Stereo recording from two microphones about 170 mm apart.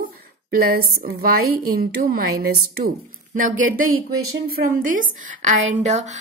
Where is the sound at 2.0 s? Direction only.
65° right (ahead or behind).